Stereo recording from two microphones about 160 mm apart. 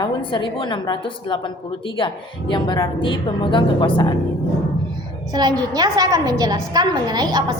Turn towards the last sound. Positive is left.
turn(degrees=-25)  # may be behind; listen again after turning